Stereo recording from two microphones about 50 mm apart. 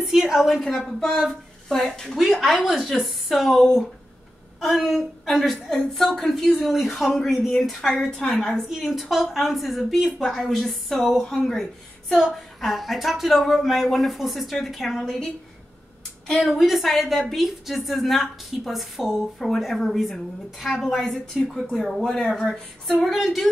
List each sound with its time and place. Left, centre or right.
0.0 s a woman's voice: centre
1.8 s speech: centre
2.1 s a woman's voice: centre
8.0 s speech: centre
8.4 s a woman's voice: centre
8.6 s a woman's voice: centre
16.3 s a woman's voice: centre
21.8 s a woman's voice: centre